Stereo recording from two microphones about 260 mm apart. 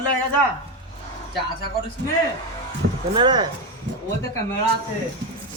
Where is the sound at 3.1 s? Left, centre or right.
Centre.